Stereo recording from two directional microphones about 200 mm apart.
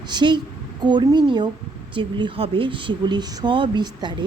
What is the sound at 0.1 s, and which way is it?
A woman's voice, 20° right (ahead or behind).